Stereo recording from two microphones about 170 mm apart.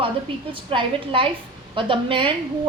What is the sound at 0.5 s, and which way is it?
A woman's voice, 30° right (ahead or behind).